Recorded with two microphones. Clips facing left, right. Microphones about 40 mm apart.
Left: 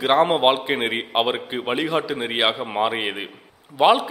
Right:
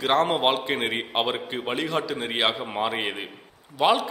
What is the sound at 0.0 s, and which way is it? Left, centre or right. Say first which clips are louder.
A man's voice: left 4 dB; centre.